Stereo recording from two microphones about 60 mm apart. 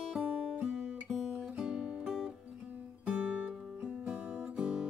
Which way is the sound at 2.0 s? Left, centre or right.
Centre.